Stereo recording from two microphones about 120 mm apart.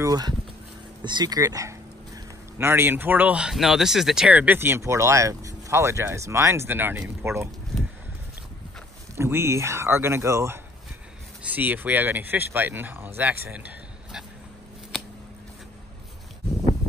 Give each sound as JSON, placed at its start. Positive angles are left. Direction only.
{"t": 0.0, "sound": "speech", "side_deg": -30}
{"t": 9.1, "sound": "speech", "side_deg": -20}
{"t": 11.4, "sound": "speech", "side_deg": -15}